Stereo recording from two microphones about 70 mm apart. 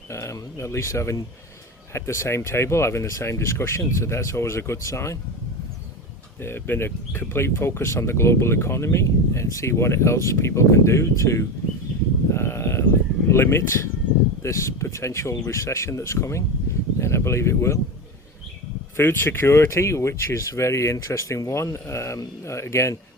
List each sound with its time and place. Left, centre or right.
0.1 s speech: left
6.4 s speech: left
12.3 s sheep: left
13.3 s speech: left
18.9 s speech: left